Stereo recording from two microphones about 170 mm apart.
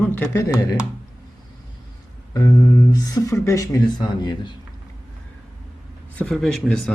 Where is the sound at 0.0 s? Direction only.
10° left (ahead or behind).